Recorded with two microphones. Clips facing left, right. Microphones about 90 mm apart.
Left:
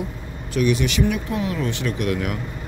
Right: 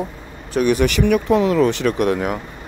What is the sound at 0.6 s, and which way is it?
Speech, 50° right (ahead or behind).